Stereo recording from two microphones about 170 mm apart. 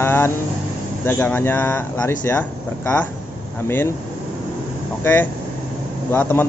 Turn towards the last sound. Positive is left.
turn(degrees=10)  # may be behind; listen again after turning